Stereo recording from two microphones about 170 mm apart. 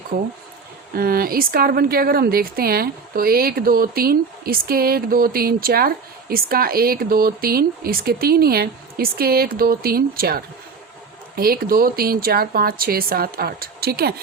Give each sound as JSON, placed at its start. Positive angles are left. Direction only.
{"t": 0.9, "sound": "speech", "side_deg": -60}